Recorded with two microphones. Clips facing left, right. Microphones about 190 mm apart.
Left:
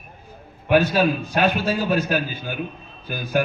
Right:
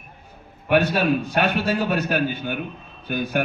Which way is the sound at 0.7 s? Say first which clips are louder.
Left 1 dB; 65° right (ahead or behind).